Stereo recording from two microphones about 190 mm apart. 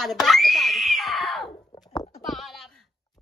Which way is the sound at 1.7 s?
20° left (ahead or behind).